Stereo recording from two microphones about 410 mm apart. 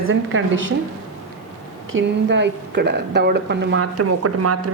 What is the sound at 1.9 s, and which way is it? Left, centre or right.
A woman's voice, right.